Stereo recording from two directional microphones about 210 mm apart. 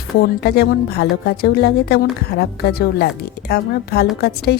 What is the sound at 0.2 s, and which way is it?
Speech, 50° left (ahead or behind).